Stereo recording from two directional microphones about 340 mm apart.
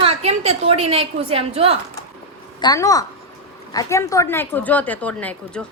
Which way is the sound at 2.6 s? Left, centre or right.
Centre.